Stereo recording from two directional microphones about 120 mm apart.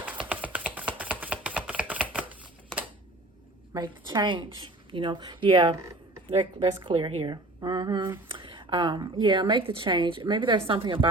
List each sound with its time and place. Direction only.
0.3 s typing: 10° right (ahead or behind)
1.2 s a sound: 10° right (ahead or behind)
3.8 s a woman's voice: 40° right (ahead or behind)